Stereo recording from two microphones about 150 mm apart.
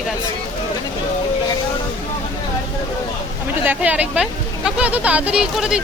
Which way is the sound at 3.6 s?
10° right (ahead or behind).